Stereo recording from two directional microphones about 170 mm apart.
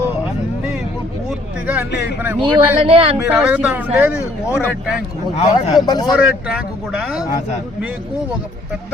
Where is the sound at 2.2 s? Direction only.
10° right (ahead or behind).